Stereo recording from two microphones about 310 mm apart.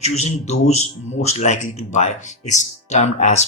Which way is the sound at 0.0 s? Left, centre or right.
Left.